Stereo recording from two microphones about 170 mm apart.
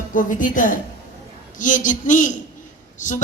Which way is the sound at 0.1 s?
50° left (ahead or behind).